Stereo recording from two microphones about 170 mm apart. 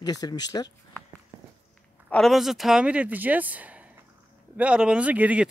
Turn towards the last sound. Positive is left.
turn(degrees=-10)  # may be behind; listen again after turning